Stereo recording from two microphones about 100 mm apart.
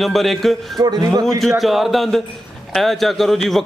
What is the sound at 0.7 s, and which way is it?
Speech, 45° right (ahead or behind).